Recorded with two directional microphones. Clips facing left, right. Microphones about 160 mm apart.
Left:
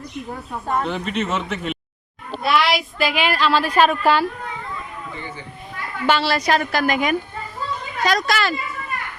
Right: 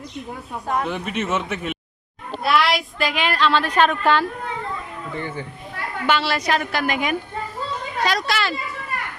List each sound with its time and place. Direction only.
0.7 s a woman's voice: 5° right (ahead or behind)
6.1 s a woman's voice: 35° left (ahead or behind)